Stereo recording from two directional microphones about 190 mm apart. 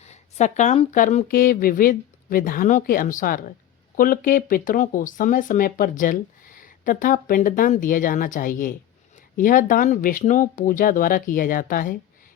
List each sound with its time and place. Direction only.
0.0 s speech: 35° left (ahead or behind)